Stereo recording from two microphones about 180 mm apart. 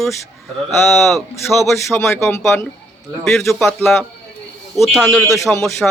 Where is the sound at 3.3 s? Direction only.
Centre (ahead or behind).